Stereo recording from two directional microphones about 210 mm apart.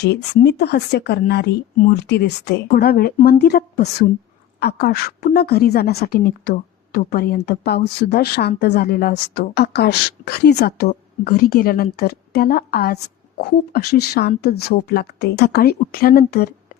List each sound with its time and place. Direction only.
0.0 s a woman's voice: 55° left (ahead or behind)